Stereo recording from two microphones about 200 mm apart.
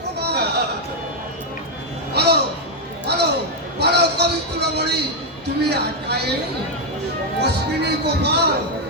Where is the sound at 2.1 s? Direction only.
55° right (ahead or behind).